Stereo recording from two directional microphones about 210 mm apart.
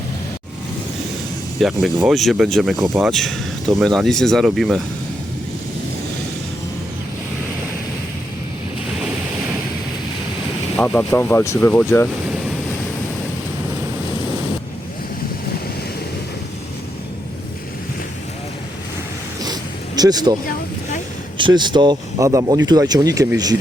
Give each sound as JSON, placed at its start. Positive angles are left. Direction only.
{"t": 1.6, "sound": "speech", "side_deg": 0}
{"t": 10.8, "sound": "speech", "side_deg": 10}
{"t": 20.0, "sound": "speech", "side_deg": -20}
{"t": 21.3, "sound": "speech", "side_deg": -20}